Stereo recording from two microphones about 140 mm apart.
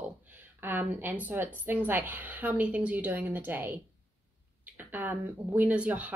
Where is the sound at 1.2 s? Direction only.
15° right (ahead or behind).